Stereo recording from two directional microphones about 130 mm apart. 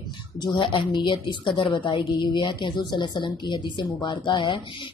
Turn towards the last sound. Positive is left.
turn(degrees=40)  # may be behind; listen again after turning